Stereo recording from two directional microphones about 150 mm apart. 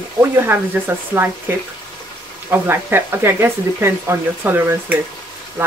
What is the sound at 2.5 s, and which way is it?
Speech, 15° right (ahead or behind).